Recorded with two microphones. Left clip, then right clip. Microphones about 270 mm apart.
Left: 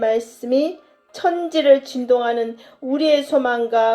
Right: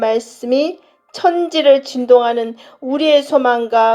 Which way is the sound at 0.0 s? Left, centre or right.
Right.